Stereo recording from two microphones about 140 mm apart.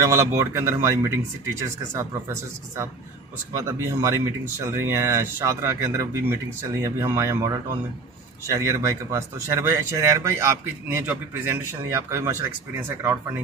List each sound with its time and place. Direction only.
0.0 s speech: 20° right (ahead or behind)
3.5 s speech: 20° right (ahead or behind)